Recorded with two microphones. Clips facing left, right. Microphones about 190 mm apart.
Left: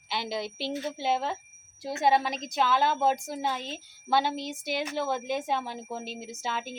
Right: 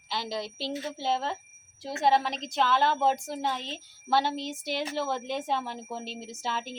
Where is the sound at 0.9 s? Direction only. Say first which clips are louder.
Even; 15° left (ahead or behind).